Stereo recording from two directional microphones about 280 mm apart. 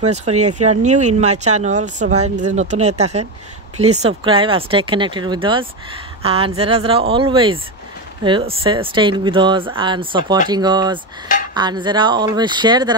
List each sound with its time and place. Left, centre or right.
0.1 s speech: right
0.4 s speech: right
0.7 s speech: right